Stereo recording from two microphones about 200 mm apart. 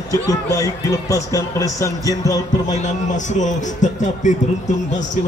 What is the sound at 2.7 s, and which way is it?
A man's voice, 35° left (ahead or behind).